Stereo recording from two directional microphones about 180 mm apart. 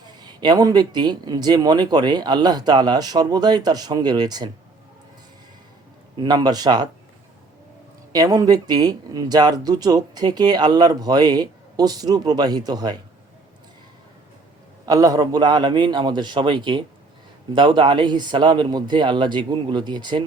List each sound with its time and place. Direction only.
0.2 s speech: 25° right (ahead or behind)
6.1 s speech: 25° right (ahead or behind)
8.1 s speech: 20° right (ahead or behind)
14.8 s speech: 20° right (ahead or behind)